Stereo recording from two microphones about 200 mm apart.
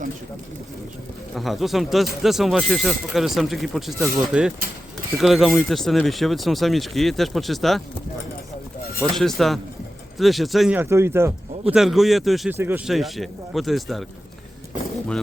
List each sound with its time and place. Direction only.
1.4 s speech: centre (ahead or behind)
9.0 s speech: centre (ahead or behind)
11.7 s speech: centre (ahead or behind)